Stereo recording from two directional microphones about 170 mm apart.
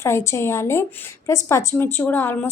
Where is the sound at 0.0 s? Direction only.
15° left (ahead or behind).